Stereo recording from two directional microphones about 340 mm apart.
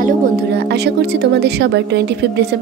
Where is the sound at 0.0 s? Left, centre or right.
Right.